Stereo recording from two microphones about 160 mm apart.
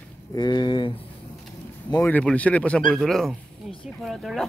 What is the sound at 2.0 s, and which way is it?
Speech, 10° left (ahead or behind).